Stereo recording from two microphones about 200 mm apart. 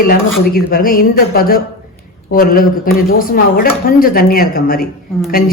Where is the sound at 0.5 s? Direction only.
45° left (ahead or behind).